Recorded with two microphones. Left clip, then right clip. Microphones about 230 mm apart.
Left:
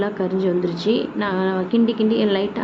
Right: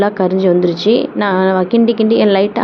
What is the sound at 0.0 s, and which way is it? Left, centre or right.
A woman's voice, centre.